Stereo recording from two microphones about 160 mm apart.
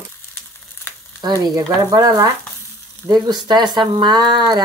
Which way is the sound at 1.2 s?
25° right (ahead or behind).